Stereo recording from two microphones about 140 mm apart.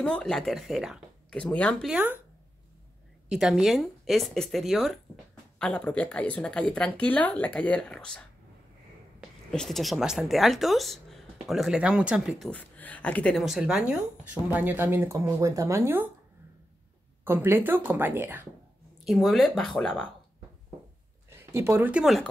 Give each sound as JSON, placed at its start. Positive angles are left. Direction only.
{"t": 0.0, "sound": "speech", "side_deg": 5}
{"t": 1.3, "sound": "a woman's voice", "side_deg": 10}
{"t": 1.9, "sound": "speech", "side_deg": -10}
{"t": 3.3, "sound": "speech", "side_deg": -5}
{"t": 5.7, "sound": "a woman's voice", "side_deg": 10}
{"t": 9.5, "sound": "speech", "side_deg": 0}
{"t": 12.4, "sound": "speech", "side_deg": 10}
{"t": 17.2, "sound": "speech", "side_deg": -15}
{"t": 19.0, "sound": "speech", "side_deg": 0}
{"t": 21.3, "sound": "speech", "side_deg": -20}
{"t": 22.0, "sound": "speech", "side_deg": 0}